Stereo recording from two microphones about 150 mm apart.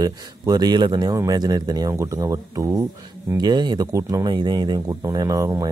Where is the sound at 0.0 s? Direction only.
25° right (ahead or behind).